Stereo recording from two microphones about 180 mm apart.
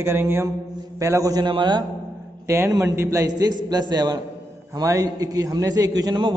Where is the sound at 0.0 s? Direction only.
15° right (ahead or behind).